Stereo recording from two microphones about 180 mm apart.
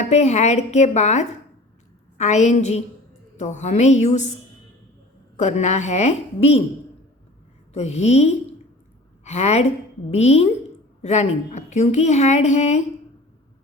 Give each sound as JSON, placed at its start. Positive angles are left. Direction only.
{"t": 0.0, "sound": "a woman's voice", "side_deg": 40}
{"t": 5.4, "sound": "a woman's voice", "side_deg": 40}
{"t": 7.7, "sound": "a woman's voice", "side_deg": 35}